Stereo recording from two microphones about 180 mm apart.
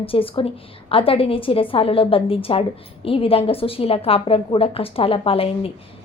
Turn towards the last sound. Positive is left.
turn(degrees=30)  # may be behind; listen again after turning